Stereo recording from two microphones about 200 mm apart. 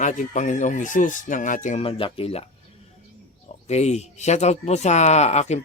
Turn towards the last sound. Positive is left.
turn(degrees=35)  # may be behind; listen again after turning